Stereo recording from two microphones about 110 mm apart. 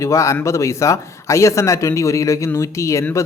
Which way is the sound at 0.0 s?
30° left (ahead or behind).